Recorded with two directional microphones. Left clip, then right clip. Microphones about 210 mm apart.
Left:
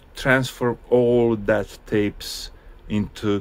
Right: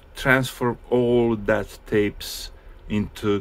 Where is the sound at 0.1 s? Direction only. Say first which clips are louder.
Even; 10° left (ahead or behind).